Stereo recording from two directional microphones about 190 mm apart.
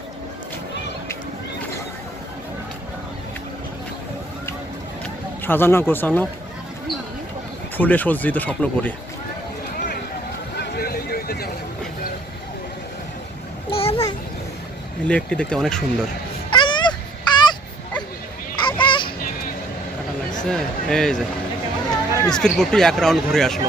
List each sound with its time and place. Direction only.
5.4 s speech: 10° left (ahead or behind)
7.8 s speech: 10° left (ahead or behind)
9.7 s run: 50° left (ahead or behind)
10.6 s vehicle: 55° left (ahead or behind)
13.7 s a sound: 30° left (ahead or behind)
15.0 s speech: 5° left (ahead or behind)
16.5 s a sound: 25° left (ahead or behind)
18.6 s honk: 25° left (ahead or behind)
20.4 s speech: centre (ahead or behind)